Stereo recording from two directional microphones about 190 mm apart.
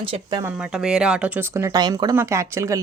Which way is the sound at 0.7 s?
5° right (ahead or behind).